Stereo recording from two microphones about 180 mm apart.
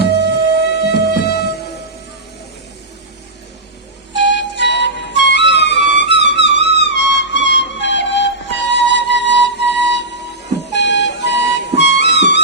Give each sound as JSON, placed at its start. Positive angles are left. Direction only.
{"t": 0.0, "sound": "music", "side_deg": -65}
{"t": 0.6, "sound": "music", "side_deg": 65}
{"t": 4.1, "sound": "music", "side_deg": 80}